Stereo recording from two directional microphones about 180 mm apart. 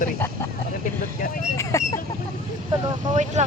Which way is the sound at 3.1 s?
40° right (ahead or behind).